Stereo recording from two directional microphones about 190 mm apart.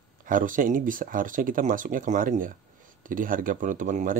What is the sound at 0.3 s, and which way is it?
Speech, 45° right (ahead or behind).